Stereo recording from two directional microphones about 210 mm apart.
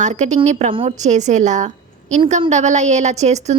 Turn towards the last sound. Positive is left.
turn(degrees=-30)  # may be behind; listen again after turning